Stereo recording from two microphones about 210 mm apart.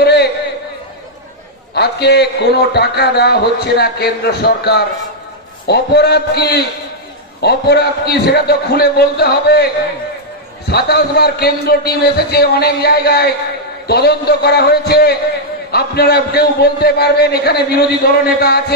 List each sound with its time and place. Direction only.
0.0 s a sound: 50° left (ahead or behind)
1.8 s a man's voice: 50° left (ahead or behind)
10.7 s a man's voice: 50° left (ahead or behind)